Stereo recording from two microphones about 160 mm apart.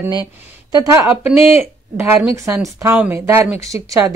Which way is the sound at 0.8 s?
20° right (ahead or behind).